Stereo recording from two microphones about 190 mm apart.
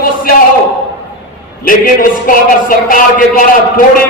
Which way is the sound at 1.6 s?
45° left (ahead or behind).